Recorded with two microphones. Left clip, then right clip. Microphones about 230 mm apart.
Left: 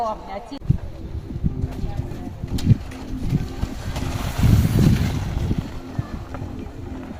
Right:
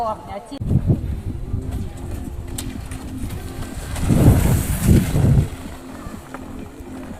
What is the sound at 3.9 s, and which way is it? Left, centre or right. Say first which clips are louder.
Boat: right 8 dB; centre.